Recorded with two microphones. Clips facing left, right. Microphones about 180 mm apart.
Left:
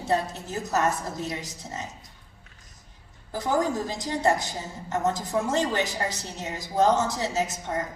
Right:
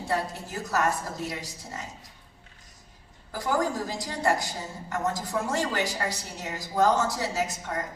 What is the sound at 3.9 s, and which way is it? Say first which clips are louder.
A woman's voice: left 3 dB; 20° left (ahead or behind).